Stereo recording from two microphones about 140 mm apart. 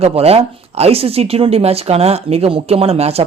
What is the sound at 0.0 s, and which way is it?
Speech, 45° right (ahead or behind).